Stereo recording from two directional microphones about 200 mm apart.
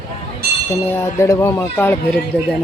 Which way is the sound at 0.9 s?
15° left (ahead or behind).